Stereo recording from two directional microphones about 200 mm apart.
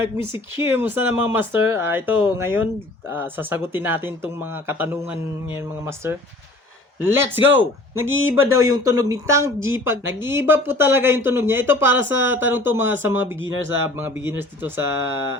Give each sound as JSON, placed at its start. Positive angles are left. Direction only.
{"t": 0.0, "sound": "speech", "side_deg": -10}